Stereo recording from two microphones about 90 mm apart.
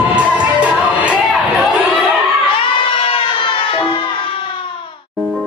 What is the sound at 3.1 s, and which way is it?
Music, 75° left (ahead or behind).